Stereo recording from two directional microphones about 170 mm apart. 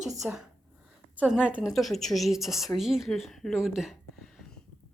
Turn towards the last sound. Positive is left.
turn(degrees=0)  # may be behind; listen again after turning